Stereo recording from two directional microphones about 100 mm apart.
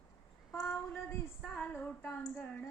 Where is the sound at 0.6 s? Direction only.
20° left (ahead or behind).